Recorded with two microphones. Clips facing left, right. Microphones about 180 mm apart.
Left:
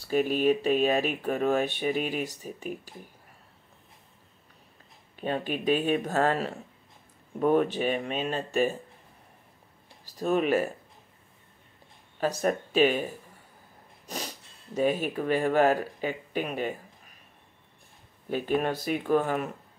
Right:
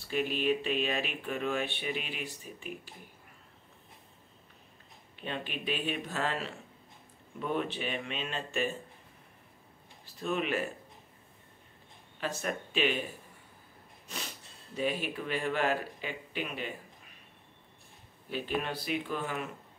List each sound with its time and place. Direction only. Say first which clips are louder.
0.0 s speech: left 7 dB; 45° left (ahead or behind)
5.1 s speech: left 8 dB; 45° left (ahead or behind)
10.0 s speech: left 7 dB; 40° left (ahead or behind)
12.2 s speech: left 8 dB; 40° left (ahead or behind)
18.3 s speech: left 7 dB; 50° left (ahead or behind)